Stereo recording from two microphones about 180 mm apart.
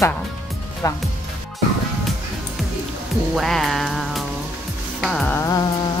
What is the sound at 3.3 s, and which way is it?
Music, centre (ahead or behind).